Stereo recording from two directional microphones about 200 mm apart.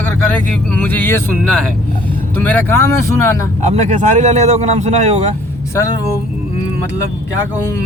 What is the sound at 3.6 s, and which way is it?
Speech, 35° right (ahead or behind).